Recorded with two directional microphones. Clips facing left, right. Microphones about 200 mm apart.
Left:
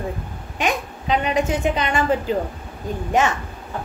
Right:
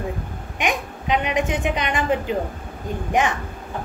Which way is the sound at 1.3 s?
15° right (ahead or behind).